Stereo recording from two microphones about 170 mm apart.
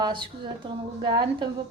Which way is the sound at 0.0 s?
30° right (ahead or behind).